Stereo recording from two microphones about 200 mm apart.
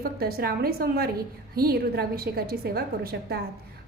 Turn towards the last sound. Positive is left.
turn(degrees=-50)  # may be behind; listen again after turning